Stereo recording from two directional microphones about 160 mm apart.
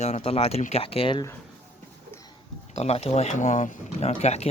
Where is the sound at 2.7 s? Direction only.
40° left (ahead or behind).